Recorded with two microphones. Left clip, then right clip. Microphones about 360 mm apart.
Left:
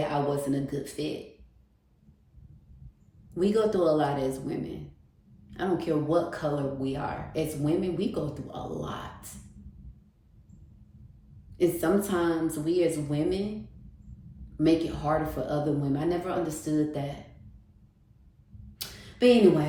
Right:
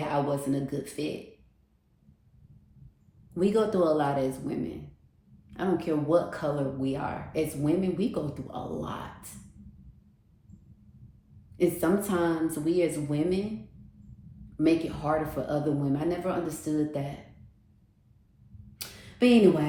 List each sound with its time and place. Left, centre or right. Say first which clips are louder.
0.1 s speech: even; centre
3.3 s speech: even; centre
11.5 s speech: left 1 dB; centre
14.6 s speech: left 1 dB; centre
18.8 s a sound: left 2 dB; centre